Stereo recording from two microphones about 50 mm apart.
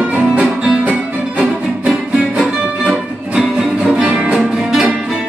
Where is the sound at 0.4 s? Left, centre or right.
Right.